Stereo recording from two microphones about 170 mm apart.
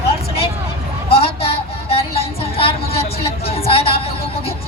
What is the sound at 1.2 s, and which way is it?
Music, 35° left (ahead or behind).